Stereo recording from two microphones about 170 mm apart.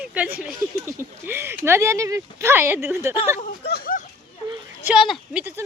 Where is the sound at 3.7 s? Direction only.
60° left (ahead or behind).